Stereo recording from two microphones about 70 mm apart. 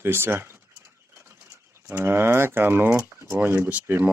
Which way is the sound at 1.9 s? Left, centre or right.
Right.